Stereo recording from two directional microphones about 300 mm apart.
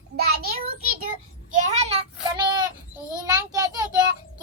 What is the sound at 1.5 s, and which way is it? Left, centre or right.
A child's voice, right.